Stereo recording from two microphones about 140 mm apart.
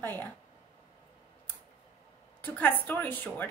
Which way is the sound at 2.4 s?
15° left (ahead or behind).